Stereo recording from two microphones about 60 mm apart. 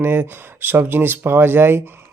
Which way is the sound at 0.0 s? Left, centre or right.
Right.